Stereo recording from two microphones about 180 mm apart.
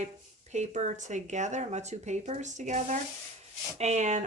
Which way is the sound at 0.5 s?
40° right (ahead or behind).